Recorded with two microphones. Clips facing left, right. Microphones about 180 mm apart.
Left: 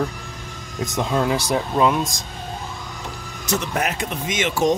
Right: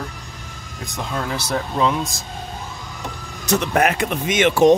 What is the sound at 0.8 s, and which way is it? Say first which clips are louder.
Speech: left 6 dB; 20° left (ahead or behind).